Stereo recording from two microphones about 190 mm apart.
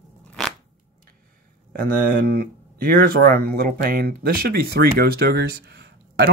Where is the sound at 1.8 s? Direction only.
50° right (ahead or behind).